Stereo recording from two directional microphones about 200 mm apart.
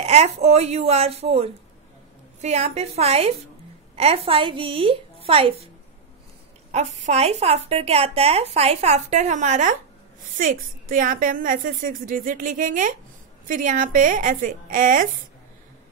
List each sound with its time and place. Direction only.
0.0 s a woman's voice: 35° right (ahead or behind)
6.7 s a woman's voice: 35° right (ahead or behind)